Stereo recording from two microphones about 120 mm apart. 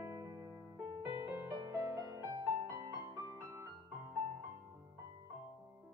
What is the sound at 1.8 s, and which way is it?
Music, 30° right (ahead or behind).